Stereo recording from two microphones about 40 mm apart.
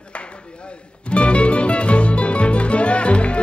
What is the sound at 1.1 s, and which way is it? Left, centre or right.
Music, left.